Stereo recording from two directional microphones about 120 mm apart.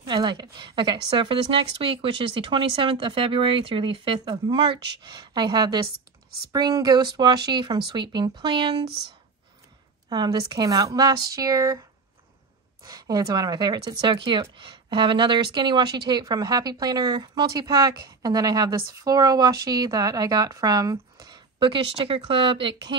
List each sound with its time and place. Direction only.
0.1 s a woman's voice: 40° right (ahead or behind)
10.0 s speech: 35° right (ahead or behind)
12.8 s speech: 30° right (ahead or behind)